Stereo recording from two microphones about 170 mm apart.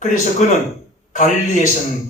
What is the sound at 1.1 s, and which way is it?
Speech, 50° left (ahead or behind).